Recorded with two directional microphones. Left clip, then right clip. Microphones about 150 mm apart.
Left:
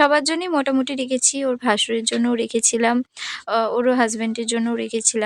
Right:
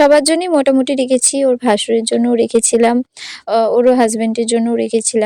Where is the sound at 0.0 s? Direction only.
35° right (ahead or behind).